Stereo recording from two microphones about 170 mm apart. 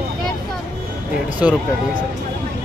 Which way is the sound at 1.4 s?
10° right (ahead or behind).